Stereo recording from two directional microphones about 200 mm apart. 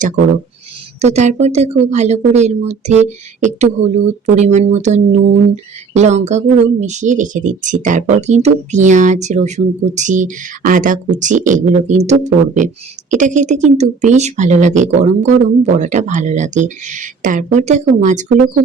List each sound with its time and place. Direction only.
1.0 s speech: 35° right (ahead or behind)